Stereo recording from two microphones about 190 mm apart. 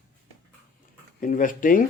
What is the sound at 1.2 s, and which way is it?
Speech, 45° left (ahead or behind).